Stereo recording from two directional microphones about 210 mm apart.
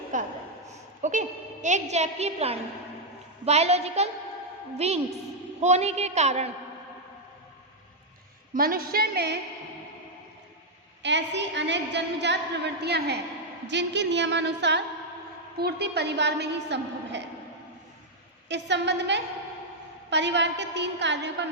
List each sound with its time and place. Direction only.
0.1 s a woman's voice: 35° right (ahead or behind)
8.5 s a woman's voice: 45° right (ahead or behind)
11.0 s a woman's voice: 55° right (ahead or behind)
18.4 s a woman's voice: 55° right (ahead or behind)